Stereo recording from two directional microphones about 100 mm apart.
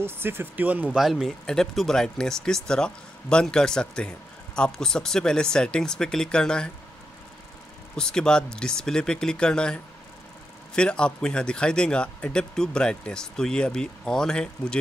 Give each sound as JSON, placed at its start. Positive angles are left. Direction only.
{"t": 0.0, "sound": "speech", "side_deg": -25}
{"t": 0.9, "sound": "speech", "side_deg": -5}
{"t": 7.9, "sound": "speech", "side_deg": 5}